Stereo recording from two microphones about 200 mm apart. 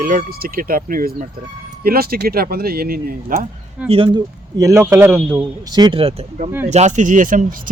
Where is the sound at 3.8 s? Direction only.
25° right (ahead or behind); by 5.5 s 10° right (ahead or behind).